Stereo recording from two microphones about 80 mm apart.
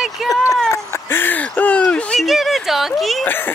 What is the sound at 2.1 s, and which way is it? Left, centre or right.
A child's voice, centre.